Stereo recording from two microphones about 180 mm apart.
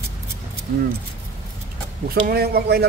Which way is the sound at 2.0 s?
60° right (ahead or behind).